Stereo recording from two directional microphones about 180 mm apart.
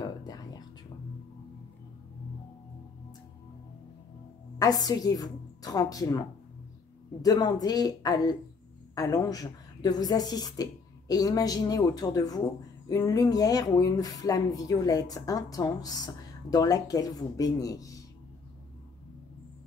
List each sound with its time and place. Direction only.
0.0 s whispering: 20° left (ahead or behind)
4.6 s a woman's voice: 20° left (ahead or behind)